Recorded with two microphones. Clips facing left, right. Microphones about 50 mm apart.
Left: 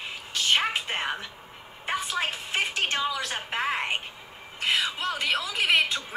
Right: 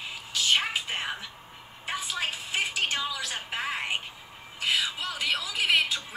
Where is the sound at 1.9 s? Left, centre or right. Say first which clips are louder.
Left 4 dB; left.